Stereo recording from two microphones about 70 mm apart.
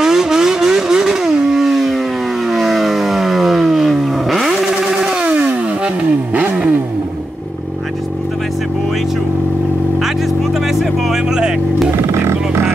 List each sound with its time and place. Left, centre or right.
0.0 s vehicle: centre
6.3 s vehicle: right
10.7 s music: centre
12.1 s music: right